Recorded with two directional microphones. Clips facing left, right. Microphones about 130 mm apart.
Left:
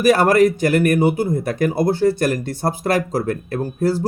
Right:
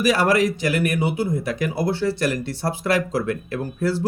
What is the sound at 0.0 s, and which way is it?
Speech, 50° left (ahead or behind).